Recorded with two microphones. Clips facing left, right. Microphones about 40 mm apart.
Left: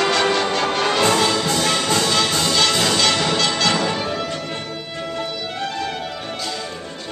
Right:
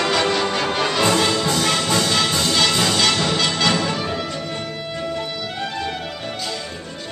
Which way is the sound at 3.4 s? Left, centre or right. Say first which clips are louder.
Even; centre.